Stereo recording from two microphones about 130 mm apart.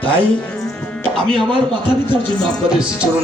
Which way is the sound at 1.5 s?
35° right (ahead or behind).